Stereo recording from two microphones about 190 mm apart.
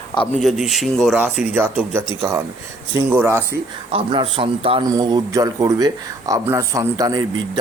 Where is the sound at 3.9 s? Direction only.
30° right (ahead or behind).